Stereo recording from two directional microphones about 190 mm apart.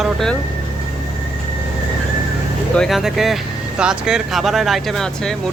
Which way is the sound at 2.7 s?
Centre (ahead or behind).